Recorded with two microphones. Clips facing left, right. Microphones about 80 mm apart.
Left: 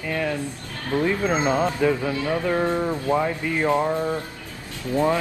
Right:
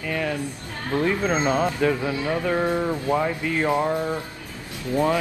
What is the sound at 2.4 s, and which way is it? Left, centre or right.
Speech, centre.